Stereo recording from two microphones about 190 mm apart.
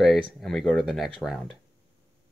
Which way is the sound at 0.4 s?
Centre (ahead or behind).